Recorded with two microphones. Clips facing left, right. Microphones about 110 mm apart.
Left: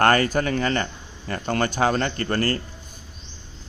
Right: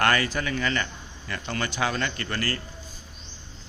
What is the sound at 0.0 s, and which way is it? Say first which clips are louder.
A man's voice: left 5 dB; 45° left (ahead or behind).